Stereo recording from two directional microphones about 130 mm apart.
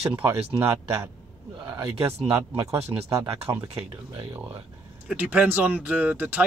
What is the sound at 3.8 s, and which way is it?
Speech, 45° right (ahead or behind).